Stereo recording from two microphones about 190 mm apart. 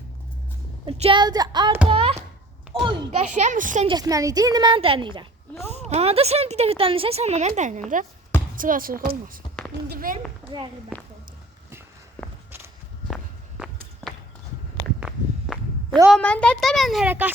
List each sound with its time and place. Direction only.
0.9 s a woman's voice: 30° right (ahead or behind)
3.2 s a woman's voice: 40° right (ahead or behind)
3.8 s a woman's voice: 20° right (ahead or behind); by 9.0 s 45° right (ahead or behind)
9.9 s a sound: 45° right (ahead or behind)
10.4 s a sound: 10° right (ahead or behind)
14.8 s walk: centre (ahead or behind)
16.1 s a child's voice: 5° left (ahead or behind)